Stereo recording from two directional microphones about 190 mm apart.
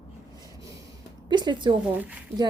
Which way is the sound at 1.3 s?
25° right (ahead or behind).